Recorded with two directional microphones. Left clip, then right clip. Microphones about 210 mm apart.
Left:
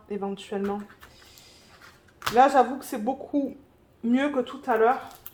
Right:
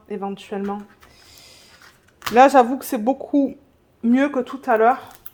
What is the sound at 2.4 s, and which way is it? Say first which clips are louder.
Speech: right 6 dB; 60° right (ahead or behind).